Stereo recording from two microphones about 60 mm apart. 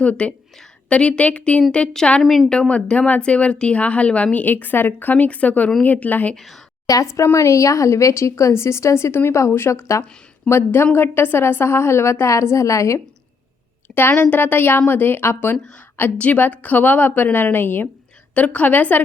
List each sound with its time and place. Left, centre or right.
0.0 s a woman's voice: centre
6.3 s a woman's voice: centre
6.8 s a woman's voice: left
9.1 s a woman's voice: left
10.5 s a woman's voice: left
14.1 s a woman's voice: left
16.1 s a woman's voice: left
18.3 s a woman's voice: left